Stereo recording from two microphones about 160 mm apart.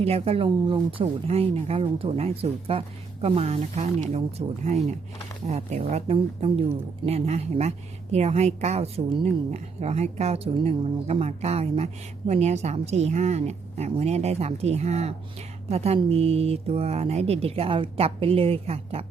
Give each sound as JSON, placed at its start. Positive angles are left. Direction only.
{"t": 0.0, "sound": "a woman's voice", "side_deg": -40}